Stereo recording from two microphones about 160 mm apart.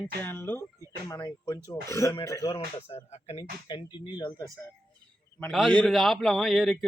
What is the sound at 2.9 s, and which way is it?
Speech, 40° left (ahead or behind).